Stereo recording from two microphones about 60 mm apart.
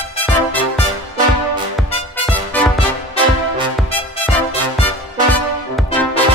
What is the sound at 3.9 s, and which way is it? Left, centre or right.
Music, left.